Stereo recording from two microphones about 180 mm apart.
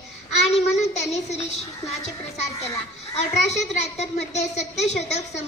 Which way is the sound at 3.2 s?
40° left (ahead or behind).